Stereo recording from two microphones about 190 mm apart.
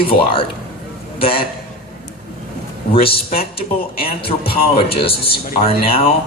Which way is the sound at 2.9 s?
30° left (ahead or behind).